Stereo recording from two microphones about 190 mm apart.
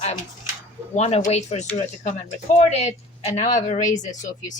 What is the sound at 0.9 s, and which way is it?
Speech, 35° left (ahead or behind).